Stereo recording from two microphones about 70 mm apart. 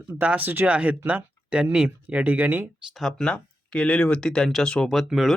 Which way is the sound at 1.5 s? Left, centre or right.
Centre.